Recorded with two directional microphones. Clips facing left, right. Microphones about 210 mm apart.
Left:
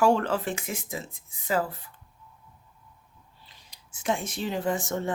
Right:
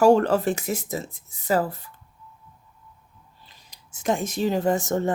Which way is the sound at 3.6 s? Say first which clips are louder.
Right 4 dB; 40° right (ahead or behind).